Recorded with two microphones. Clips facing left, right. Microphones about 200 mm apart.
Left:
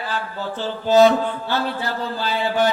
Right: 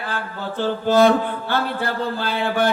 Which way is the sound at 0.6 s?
55° right (ahead or behind).